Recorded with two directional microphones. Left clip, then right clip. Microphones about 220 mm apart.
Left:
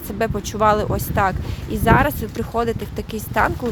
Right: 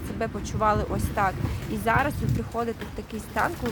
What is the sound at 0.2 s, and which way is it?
Speech, 35° left (ahead or behind).